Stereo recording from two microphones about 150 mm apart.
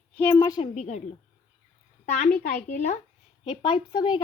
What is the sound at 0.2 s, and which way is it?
Speech, 15° left (ahead or behind).